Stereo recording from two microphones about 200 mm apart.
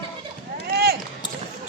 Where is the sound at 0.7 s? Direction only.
50° right (ahead or behind).